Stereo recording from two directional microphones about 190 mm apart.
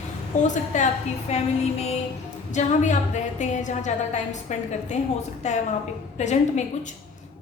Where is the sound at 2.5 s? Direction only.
40° left (ahead or behind).